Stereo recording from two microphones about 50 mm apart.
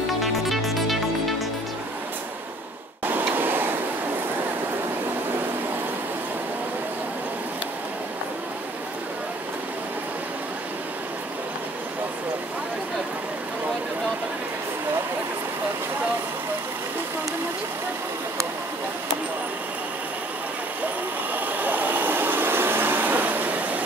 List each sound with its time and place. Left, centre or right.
0.2 s music: centre
3.3 s a sound: right
21.3 s vehicle: right